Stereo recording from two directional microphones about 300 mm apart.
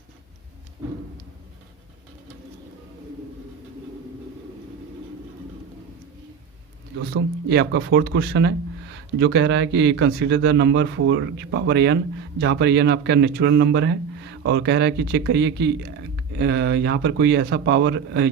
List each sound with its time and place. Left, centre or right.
7.1 s speech: right